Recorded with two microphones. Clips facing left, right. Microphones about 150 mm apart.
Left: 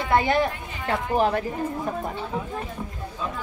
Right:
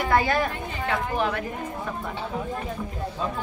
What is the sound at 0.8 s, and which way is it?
Speech, 40° left (ahead or behind).